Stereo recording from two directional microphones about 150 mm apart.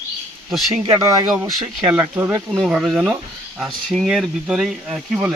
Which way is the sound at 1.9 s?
10° right (ahead or behind).